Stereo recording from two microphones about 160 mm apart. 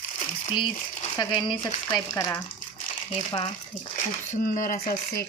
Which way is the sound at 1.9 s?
15° left (ahead or behind).